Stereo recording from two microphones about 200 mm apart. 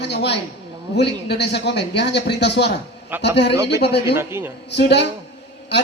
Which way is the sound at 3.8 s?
55° left (ahead or behind).